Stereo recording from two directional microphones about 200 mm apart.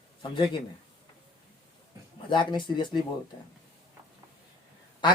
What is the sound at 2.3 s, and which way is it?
Speech, 25° left (ahead or behind).